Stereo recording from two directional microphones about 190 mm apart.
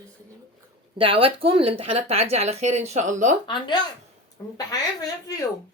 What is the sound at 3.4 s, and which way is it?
A woman's voice, 25° left (ahead or behind).